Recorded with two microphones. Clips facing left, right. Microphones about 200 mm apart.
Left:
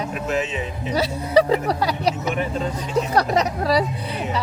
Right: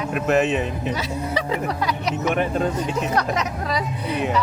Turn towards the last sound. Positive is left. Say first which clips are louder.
# left 5 dB
turn(degrees=35)  # may be behind; listen again after turning